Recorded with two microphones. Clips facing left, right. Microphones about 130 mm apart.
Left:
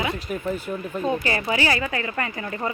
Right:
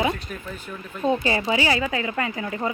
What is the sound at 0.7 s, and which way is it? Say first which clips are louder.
Speech: left 7 dB; 30° left (ahead or behind).